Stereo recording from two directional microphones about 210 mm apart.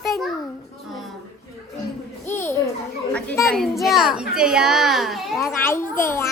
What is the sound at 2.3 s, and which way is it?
Children playing, 10° left (ahead or behind).